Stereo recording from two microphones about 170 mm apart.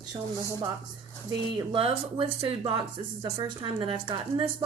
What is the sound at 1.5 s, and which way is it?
A woman's voice, 30° right (ahead or behind).